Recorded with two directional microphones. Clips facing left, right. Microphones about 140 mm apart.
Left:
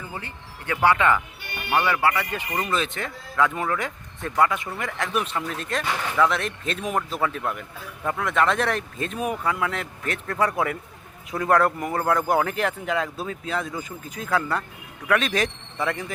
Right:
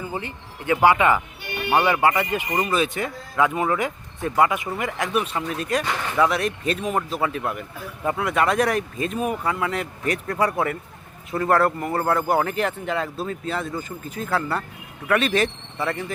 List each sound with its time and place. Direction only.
0.0 s speech: 15° right (ahead or behind)
5.1 s a man's voice: 5° right (ahead or behind)